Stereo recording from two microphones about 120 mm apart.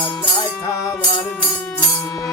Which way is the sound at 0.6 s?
30° left (ahead or behind).